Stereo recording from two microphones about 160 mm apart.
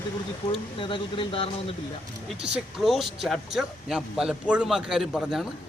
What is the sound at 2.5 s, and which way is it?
A man's voice, centre (ahead or behind).